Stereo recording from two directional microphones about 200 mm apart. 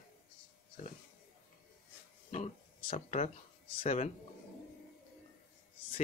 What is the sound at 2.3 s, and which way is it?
Speech, 30° left (ahead or behind).